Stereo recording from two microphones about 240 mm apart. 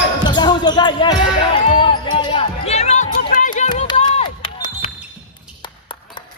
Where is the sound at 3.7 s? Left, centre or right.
Centre.